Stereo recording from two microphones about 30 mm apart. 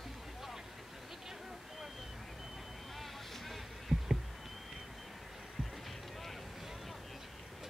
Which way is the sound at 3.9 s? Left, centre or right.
Right.